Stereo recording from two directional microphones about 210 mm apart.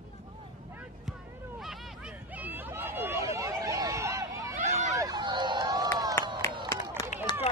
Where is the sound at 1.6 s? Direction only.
5° right (ahead or behind); by 6.1 s 20° right (ahead or behind).